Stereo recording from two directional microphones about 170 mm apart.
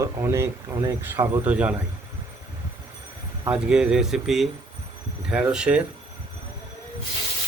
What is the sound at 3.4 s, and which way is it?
Speech, 5° right (ahead or behind).